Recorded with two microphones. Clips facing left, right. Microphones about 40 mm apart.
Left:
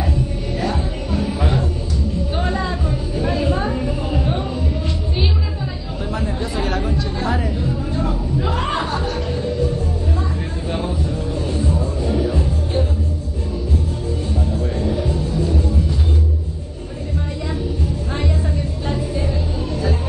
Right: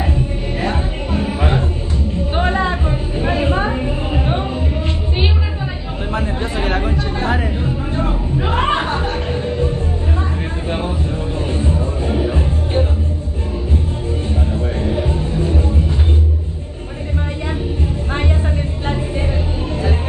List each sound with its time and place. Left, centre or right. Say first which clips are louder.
0.6 s music: right 2 dB; right
2.1 s a sound: right 6 dB; right
6.1 s chatter: right 3 dB; right
11.3 s music: right 1 dB; right
14.5 s music: right 1 dB; right
18.9 s music: right 2 dB; right